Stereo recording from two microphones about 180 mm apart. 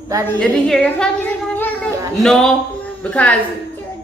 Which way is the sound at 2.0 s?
20° right (ahead or behind).